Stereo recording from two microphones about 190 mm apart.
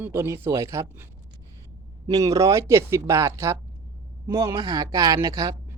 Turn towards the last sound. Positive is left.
turn(degrees=-15)  # may be behind; listen again after turning